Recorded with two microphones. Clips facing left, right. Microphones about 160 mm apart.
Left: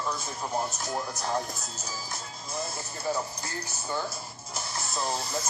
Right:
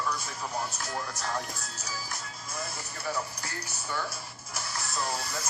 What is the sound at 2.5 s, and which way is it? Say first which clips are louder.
Music: left 4 dB; 20° left (ahead or behind).